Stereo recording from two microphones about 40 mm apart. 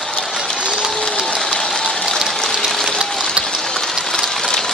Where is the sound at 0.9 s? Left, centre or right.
Centre.